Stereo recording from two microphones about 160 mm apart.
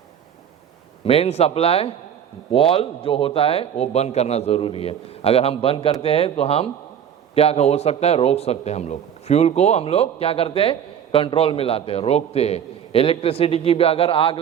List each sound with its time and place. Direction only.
1.0 s a man's voice: 40° left (ahead or behind)